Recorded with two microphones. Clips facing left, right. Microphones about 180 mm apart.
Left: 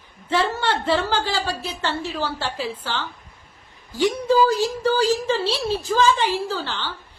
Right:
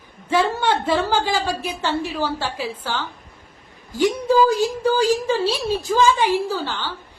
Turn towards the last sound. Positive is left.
turn(degrees=-10)  # may be behind; listen again after turning